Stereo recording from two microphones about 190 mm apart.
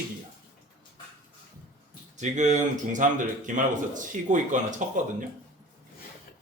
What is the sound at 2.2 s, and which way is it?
A man's voice, 40° right (ahead or behind).